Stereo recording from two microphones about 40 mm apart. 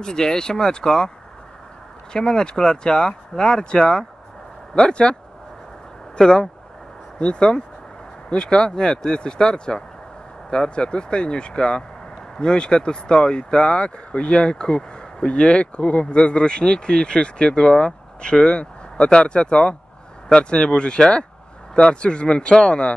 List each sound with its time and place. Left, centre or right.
0.0 s speech: centre
2.1 s speech: centre
6.1 s speech: centre